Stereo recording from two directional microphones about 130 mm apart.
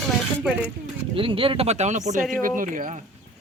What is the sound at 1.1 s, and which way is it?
Speech, 45° right (ahead or behind).